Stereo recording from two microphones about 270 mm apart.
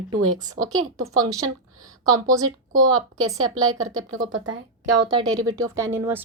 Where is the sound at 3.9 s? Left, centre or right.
Right.